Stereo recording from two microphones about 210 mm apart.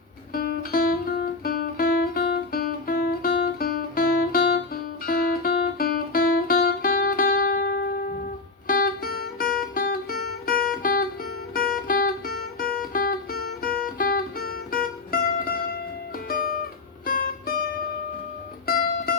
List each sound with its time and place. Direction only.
0.3 s music: 45° left (ahead or behind)